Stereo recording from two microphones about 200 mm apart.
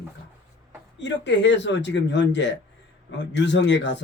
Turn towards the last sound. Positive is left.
turn(degrees=60)  # may be behind; listen again after turning